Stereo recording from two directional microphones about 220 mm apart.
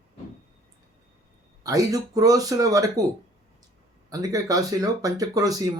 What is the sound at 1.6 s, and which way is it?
Speech, 15° right (ahead or behind).